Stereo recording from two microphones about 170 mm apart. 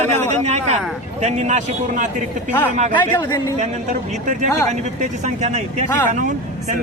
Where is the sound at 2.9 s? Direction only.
15° left (ahead or behind).